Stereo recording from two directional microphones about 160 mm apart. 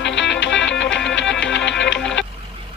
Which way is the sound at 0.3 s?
5° left (ahead or behind).